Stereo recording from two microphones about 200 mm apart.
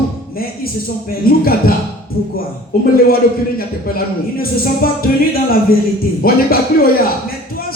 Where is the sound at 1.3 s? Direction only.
45° left (ahead or behind).